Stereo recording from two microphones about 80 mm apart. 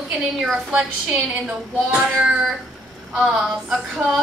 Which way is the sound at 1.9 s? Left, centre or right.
Centre.